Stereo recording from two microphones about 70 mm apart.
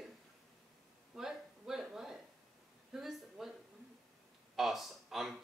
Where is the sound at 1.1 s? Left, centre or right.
Centre.